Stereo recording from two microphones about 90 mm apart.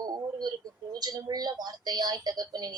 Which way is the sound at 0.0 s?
50° right (ahead or behind).